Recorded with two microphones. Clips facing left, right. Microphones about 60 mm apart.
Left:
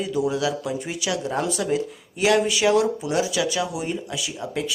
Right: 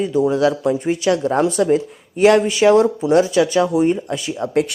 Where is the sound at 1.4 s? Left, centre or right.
Right.